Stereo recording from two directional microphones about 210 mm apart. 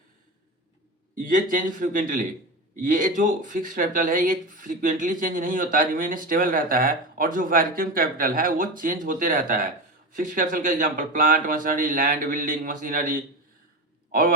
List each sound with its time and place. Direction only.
1.1 s a man's voice: 40° right (ahead or behind)